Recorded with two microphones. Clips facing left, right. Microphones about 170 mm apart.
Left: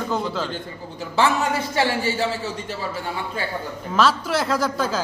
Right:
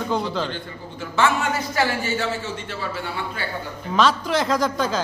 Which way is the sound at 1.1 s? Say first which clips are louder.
Left 1 dB; 30° left (ahead or behind).